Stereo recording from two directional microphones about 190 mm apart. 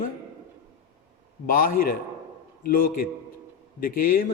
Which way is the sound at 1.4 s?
45° left (ahead or behind).